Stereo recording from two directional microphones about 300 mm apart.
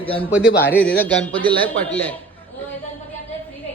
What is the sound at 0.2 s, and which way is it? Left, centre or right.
A man's voice, centre.